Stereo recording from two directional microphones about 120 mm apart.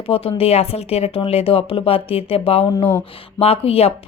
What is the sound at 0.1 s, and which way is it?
Speech, 55° left (ahead or behind).